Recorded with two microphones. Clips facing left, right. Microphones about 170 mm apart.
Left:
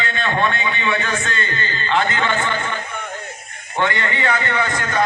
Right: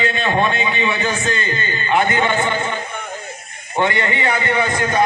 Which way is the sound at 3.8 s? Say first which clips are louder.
Right 2 dB; 20° right (ahead or behind).